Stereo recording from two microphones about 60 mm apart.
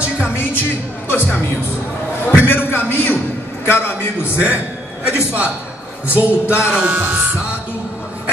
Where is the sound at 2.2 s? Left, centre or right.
Left.